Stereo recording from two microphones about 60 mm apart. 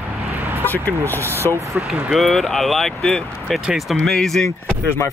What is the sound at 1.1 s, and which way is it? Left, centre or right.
Speech, left.